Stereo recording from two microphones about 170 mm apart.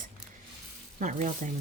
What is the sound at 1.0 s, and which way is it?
Speech, 45° right (ahead or behind).